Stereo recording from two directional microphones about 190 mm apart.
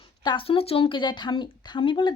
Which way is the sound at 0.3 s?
30° left (ahead or behind).